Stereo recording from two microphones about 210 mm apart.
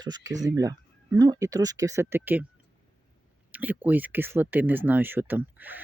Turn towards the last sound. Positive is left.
turn(degrees=-10)  # may be behind; listen again after turning